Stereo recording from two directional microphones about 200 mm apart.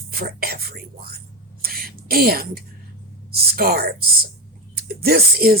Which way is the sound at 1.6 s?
50° right (ahead or behind).